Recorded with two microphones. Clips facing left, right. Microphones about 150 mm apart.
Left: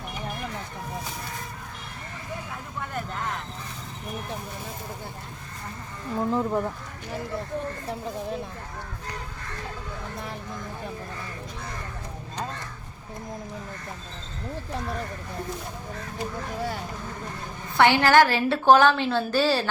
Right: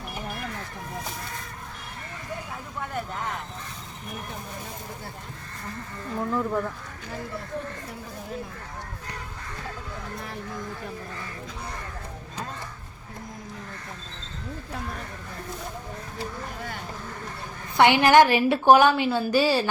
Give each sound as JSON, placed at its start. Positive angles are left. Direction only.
{"t": 6.1, "sound": "speech", "side_deg": 25}
{"t": 17.7, "sound": "a woman's voice", "side_deg": -15}